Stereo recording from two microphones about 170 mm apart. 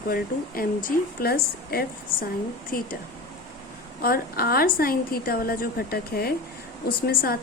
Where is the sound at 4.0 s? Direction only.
60° left (ahead or behind).